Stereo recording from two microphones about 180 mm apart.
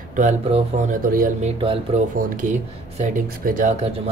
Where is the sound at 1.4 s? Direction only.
35° right (ahead or behind).